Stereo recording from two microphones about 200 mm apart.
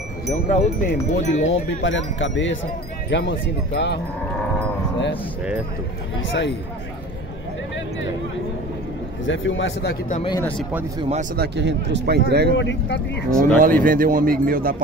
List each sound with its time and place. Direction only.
0.3 s wind chime: 40° left (ahead or behind)
1.5 s speech: 65° left (ahead or behind)
6.2 s speech: 65° left (ahead or behind)
9.2 s speech: 70° left (ahead or behind)
11.0 s speech: 30° right (ahead or behind)
11.3 s speech: 55° right (ahead or behind)
12.5 s speech: 65° left (ahead or behind)
13.4 s speech: 40° right (ahead or behind)